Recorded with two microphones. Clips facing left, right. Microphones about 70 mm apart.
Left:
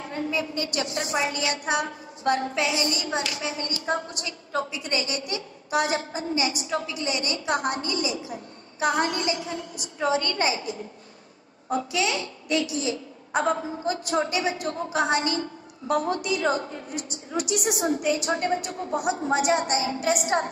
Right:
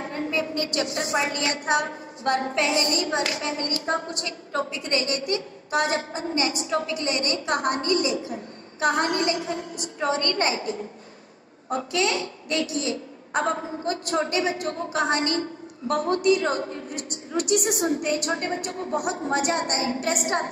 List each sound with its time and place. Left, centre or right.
0.0 s a woman's voice: right
17.6 s a woman's voice: left
18.0 s a woman's voice: right
19.3 s a woman's voice: right